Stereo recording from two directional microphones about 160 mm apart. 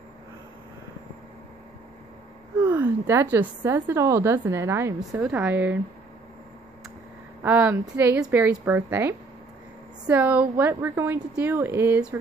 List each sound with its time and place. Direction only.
2.6 s a woman's voice: 10° right (ahead or behind)
7.4 s a woman's voice: 10° right (ahead or behind)